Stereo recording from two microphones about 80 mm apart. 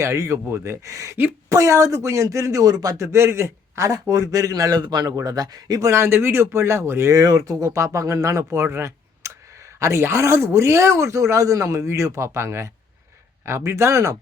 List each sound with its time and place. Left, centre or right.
0.0 s speech: right
3.0 s a man's voice: right
5.9 s speech: right